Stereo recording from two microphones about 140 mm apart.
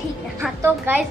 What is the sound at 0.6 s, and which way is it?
Speech, 15° right (ahead or behind).